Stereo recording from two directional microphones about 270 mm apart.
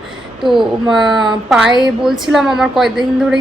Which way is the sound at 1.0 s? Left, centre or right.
Centre.